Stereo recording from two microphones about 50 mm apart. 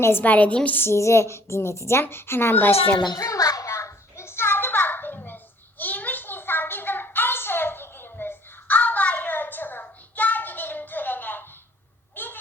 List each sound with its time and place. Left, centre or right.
0.2 s a woman's voice: left
0.9 s a woman's voice: left
2.0 s speech: left
3.2 s a sound: left
9.8 s hands: left
12.1 s a sound: left